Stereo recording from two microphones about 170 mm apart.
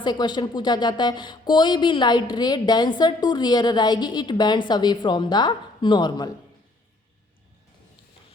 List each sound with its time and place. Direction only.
0.0 s a woman's voice: 25° left (ahead or behind)